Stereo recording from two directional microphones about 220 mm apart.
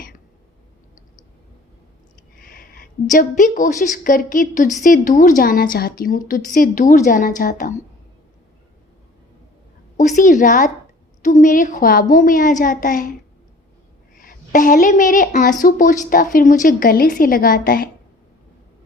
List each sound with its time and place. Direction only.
2.4 s a woman's voice: 40° left (ahead or behind)
10.0 s a woman's voice: 35° left (ahead or behind)
14.2 s a woman's voice: 35° left (ahead or behind)